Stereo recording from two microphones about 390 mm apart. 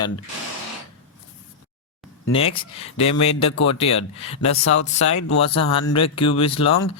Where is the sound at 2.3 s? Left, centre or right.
Centre.